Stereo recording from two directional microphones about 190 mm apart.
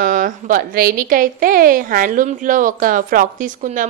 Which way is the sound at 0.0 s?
45° right (ahead or behind).